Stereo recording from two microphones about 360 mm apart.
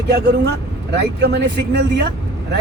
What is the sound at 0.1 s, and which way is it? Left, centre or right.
Speech, right.